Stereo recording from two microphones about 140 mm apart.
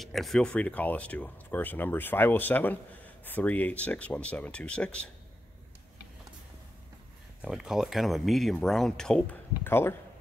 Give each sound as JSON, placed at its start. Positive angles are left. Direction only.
{"t": 0.0, "sound": "speech", "side_deg": 0}
{"t": 7.4, "sound": "speech", "side_deg": -5}
{"t": 9.7, "sound": "speech", "side_deg": 15}